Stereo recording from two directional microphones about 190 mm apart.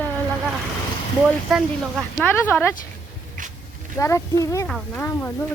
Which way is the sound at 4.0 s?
15° left (ahead or behind).